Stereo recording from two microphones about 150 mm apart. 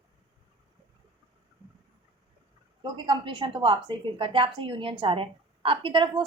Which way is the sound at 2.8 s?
30° right (ahead or behind).